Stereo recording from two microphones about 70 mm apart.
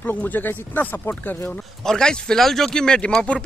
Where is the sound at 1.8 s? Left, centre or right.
Centre.